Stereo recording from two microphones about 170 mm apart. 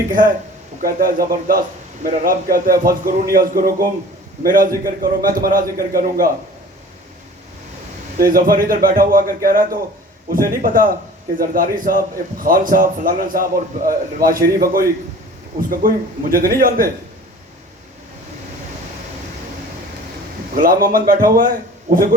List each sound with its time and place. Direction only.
0.1 s a man's voice: 55° right (ahead or behind)
8.2 s a man's voice: 55° right (ahead or behind)
20.6 s a man's voice: 60° right (ahead or behind)